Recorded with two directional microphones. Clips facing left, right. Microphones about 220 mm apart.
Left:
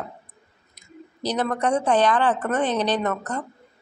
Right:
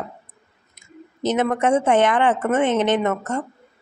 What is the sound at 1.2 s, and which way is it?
A woman's voice, 25° right (ahead or behind).